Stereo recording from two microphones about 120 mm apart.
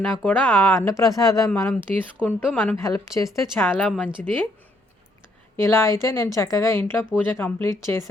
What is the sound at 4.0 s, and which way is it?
Speech, 15° left (ahead or behind).